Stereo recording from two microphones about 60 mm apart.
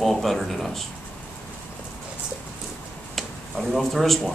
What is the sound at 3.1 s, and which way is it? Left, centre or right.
Speech, centre.